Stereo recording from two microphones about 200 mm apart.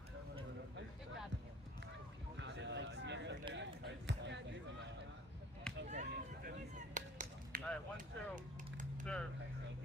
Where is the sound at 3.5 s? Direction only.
60° right (ahead or behind).